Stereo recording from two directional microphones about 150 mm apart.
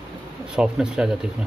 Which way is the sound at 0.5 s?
5° right (ahead or behind).